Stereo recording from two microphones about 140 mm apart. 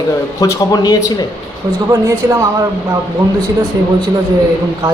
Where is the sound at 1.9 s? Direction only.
20° right (ahead or behind).